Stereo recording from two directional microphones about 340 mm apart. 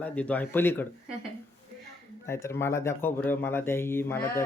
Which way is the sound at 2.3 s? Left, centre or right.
Centre.